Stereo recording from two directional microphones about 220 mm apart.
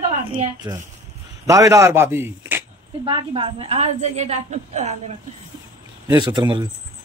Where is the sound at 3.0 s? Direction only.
25° right (ahead or behind).